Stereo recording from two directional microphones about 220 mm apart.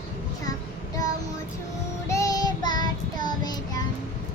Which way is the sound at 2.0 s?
15° left (ahead or behind).